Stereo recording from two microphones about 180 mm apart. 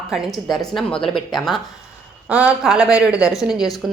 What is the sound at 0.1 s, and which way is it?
Speech, centre (ahead or behind).